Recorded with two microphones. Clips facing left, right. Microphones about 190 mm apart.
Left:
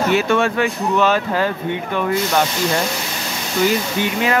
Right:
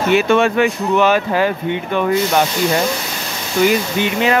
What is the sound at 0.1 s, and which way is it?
Speech, 20° right (ahead or behind).